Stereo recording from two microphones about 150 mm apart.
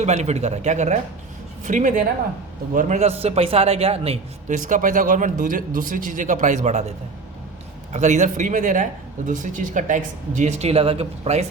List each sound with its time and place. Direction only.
0.0 s a man's voice: 50° right (ahead or behind)
2.7 s a man's voice: 50° right (ahead or behind)
4.5 s speech: 60° right (ahead or behind)
7.9 s speech: 50° right (ahead or behind)